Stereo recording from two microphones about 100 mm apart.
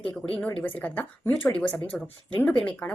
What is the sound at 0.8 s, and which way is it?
Speech, 15° left (ahead or behind).